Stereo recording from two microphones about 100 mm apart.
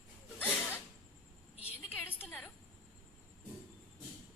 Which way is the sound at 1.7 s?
20° left (ahead or behind).